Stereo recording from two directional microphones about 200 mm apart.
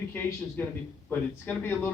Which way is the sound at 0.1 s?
10° left (ahead or behind).